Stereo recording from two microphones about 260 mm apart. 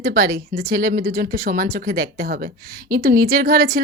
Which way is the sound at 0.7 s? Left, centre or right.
Right.